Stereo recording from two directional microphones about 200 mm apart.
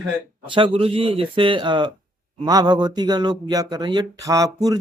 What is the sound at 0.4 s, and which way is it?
Speech, 25° right (ahead or behind).